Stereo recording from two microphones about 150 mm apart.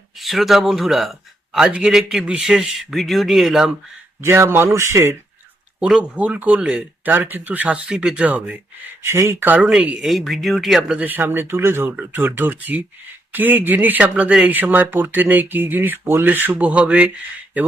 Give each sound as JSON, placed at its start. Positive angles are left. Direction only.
{"t": 0.2, "sound": "speech", "side_deg": 0}
{"t": 4.2, "sound": "speech", "side_deg": -15}
{"t": 5.8, "sound": "speech", "side_deg": -5}